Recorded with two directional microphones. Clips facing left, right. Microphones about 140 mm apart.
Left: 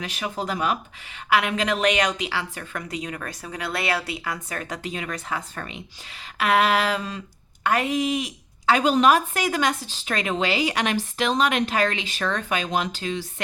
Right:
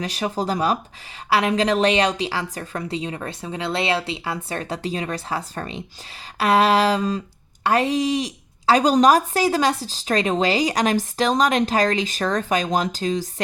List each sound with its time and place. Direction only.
0.0 s a woman's voice: 35° right (ahead or behind)